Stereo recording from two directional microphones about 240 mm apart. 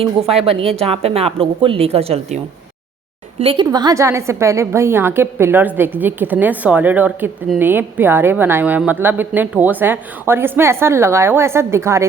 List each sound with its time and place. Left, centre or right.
0.0 s a woman's voice: right